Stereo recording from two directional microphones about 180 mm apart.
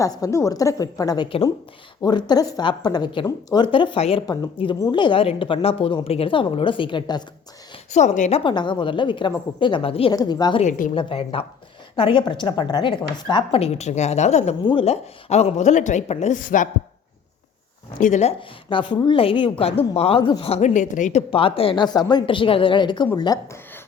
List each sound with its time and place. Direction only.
0.0 s speech: 20° left (ahead or behind)
7.9 s a woman's voice: 40° left (ahead or behind)
8.4 s speech: 25° left (ahead or behind)
10.6 s a woman's voice: 45° left (ahead or behind)
10.9 s a woman's voice: 30° left (ahead or behind)
14.6 s a woman's voice: 25° left (ahead or behind); by 16.6 s 45° left (ahead or behind)
18.0 s a woman's voice: 40° left (ahead or behind); by 23.8 s 15° left (ahead or behind)